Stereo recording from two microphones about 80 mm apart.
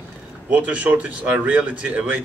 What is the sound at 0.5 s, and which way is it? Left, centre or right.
Speech, centre.